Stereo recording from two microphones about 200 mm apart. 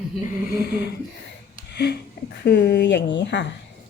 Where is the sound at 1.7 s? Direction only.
55° left (ahead or behind).